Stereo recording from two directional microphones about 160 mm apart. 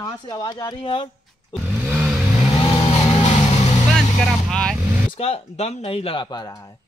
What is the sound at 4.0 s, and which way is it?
Vehicle, 5° left (ahead or behind).